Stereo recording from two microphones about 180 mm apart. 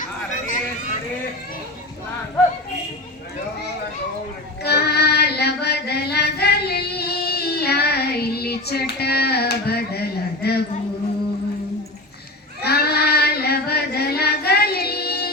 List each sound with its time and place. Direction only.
4.6 s music: 65° left (ahead or behind)
12.6 s child singing: 60° left (ahead or behind)